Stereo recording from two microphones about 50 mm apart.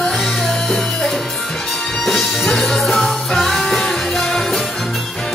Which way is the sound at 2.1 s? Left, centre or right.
Centre.